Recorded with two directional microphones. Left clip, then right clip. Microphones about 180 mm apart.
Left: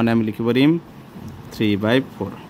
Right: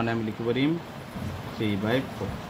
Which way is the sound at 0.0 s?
65° left (ahead or behind).